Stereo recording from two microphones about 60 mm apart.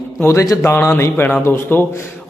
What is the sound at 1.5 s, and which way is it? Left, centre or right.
Mantra, left.